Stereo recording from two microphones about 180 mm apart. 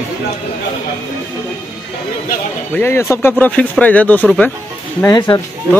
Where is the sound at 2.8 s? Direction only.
15° left (ahead or behind).